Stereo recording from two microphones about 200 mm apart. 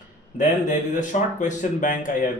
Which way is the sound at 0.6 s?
40° left (ahead or behind).